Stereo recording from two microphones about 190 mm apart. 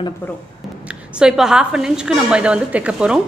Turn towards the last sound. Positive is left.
turn(degrees=-5)  # may be behind; listen again after turning